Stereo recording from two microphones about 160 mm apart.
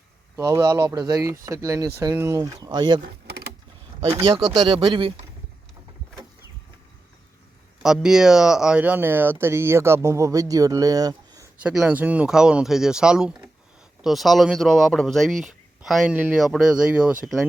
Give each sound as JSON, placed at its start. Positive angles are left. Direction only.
{"t": 0.3, "sound": "speech", "side_deg": -20}
{"t": 4.0, "sound": "speech", "side_deg": -35}
{"t": 7.8, "sound": "speech", "side_deg": -5}
{"t": 11.5, "sound": "speech", "side_deg": -5}